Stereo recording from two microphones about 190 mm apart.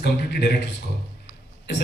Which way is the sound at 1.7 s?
65° left (ahead or behind).